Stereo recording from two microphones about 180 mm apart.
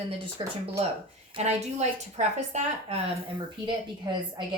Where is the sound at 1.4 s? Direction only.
40° right (ahead or behind).